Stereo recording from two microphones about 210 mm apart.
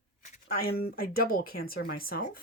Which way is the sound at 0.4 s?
45° left (ahead or behind).